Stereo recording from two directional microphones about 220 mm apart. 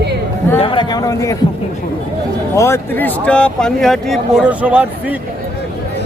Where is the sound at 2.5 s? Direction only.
10° left (ahead or behind); by 5.2 s 5° right (ahead or behind).